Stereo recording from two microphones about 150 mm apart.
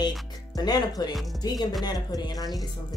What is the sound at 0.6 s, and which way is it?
Speech, 25° left (ahead or behind).